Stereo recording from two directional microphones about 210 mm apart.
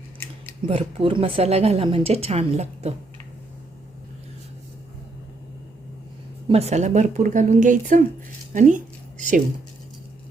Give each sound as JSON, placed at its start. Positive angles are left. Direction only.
{"t": 0.6, "sound": "speech", "side_deg": -25}
{"t": 6.5, "sound": "a woman's voice", "side_deg": -30}